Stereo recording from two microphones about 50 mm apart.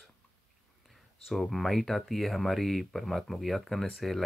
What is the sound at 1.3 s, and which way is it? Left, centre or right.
Speech, centre.